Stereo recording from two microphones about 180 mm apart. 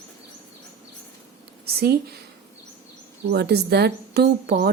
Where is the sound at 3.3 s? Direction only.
65° right (ahead or behind).